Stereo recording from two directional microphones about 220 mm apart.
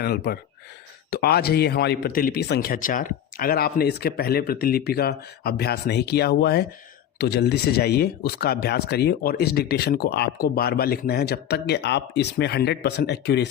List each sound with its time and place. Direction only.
0.0 s speech: 45° left (ahead or behind)